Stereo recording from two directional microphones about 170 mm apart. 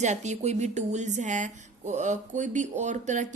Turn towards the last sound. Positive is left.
turn(degrees=-45)  # may be behind; listen again after turning